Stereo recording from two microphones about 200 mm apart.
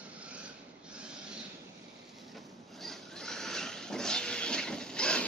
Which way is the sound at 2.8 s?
Centre (ahead or behind).